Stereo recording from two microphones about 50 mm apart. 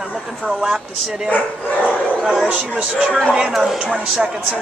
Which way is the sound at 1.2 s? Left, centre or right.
Left.